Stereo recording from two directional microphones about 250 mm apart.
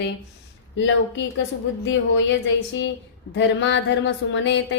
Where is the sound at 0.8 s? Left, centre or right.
Left.